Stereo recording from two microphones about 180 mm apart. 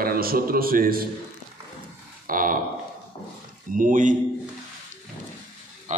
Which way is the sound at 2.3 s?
50° right (ahead or behind).